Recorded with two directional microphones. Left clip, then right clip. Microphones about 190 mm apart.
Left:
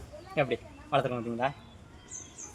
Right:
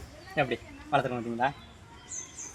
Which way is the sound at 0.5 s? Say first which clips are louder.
Right 1 dB; 10° left (ahead or behind).